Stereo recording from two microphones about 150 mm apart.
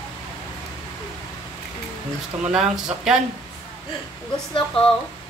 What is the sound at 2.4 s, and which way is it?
Speech, 5° right (ahead or behind).